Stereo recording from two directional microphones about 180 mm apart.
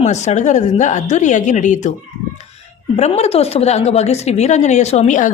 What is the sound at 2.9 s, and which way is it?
A woman's voice, 35° left (ahead or behind).